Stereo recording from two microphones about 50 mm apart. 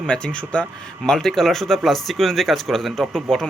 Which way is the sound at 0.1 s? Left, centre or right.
Left.